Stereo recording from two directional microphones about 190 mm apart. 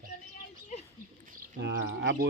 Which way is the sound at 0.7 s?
35° left (ahead or behind).